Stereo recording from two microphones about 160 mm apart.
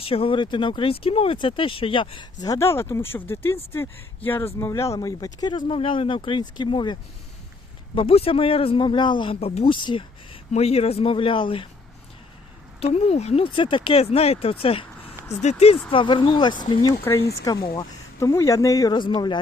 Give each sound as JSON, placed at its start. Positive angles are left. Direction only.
{"t": 0.0, "sound": "speech", "side_deg": 35}
{"t": 12.8, "sound": "speech", "side_deg": 40}